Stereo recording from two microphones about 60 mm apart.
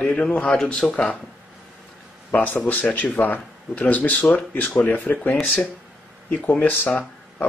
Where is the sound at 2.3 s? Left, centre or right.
Left.